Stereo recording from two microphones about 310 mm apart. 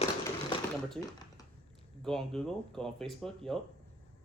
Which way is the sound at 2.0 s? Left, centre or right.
Centre.